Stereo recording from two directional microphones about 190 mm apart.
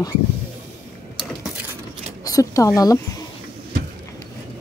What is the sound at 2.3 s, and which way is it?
Speech, 20° left (ahead or behind).